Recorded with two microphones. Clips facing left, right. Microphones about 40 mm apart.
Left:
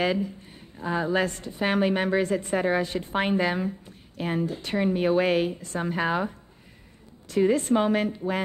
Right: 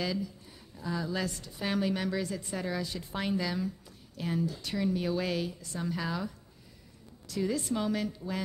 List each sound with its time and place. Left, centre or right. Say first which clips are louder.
0.0 s a woman's voice: left 8 dB; left